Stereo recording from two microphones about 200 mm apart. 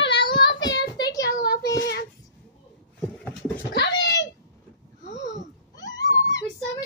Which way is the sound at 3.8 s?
60° left (ahead or behind).